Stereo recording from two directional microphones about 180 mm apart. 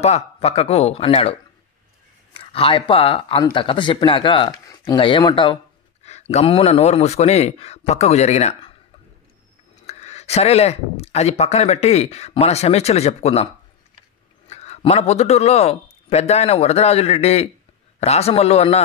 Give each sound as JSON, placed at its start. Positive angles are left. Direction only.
{"t": 0.0, "sound": "speech", "side_deg": 35}
{"t": 9.8, "sound": "speech", "side_deg": 40}
{"t": 14.5, "sound": "speech", "side_deg": 35}